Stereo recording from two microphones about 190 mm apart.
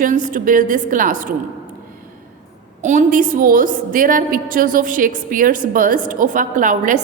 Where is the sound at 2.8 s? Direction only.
40° right (ahead or behind).